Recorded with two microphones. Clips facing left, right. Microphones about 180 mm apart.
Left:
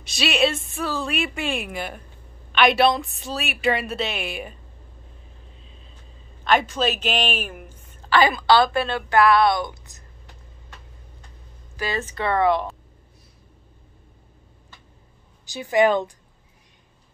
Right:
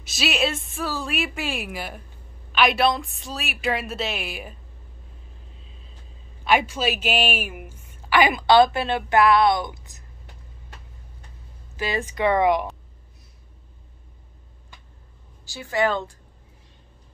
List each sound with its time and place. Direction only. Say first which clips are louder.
0.0 s a woman's voice: left 3 dB; 5° right (ahead or behind)
6.4 s a woman's voice: left 1 dB; 10° right (ahead or behind)
11.7 s a woman's voice: right 1 dB; 20° right (ahead or behind)
15.4 s a woman's voice: left 5 dB; 20° left (ahead or behind)